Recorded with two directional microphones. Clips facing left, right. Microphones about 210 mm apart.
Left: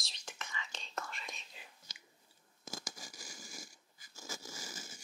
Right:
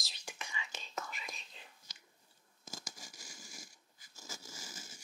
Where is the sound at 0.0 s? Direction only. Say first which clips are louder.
Right 1 dB; 10° right (ahead or behind).